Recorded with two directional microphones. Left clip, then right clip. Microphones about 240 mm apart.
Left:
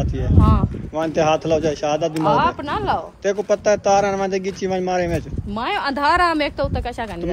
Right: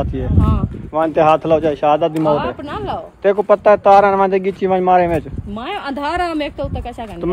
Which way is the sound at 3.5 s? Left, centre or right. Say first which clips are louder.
Right 7 dB; centre.